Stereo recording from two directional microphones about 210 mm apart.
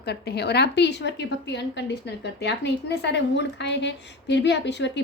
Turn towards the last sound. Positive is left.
turn(degrees=55)  # may be behind; listen again after turning